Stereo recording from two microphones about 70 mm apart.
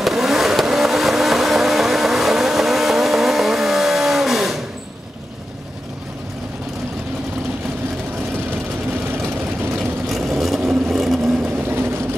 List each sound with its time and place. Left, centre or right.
0.0 s vehicle: centre
10.0 s vehicle: centre
11.7 s vehicle: right